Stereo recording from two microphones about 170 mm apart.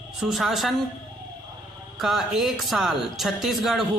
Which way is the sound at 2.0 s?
Centre (ahead or behind).